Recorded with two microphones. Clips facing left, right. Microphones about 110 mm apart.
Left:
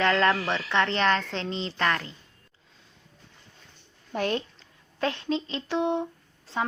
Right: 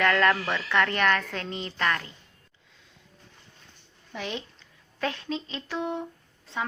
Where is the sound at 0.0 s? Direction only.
20° left (ahead or behind).